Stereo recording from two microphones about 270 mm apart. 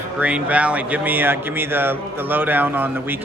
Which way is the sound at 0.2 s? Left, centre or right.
Centre.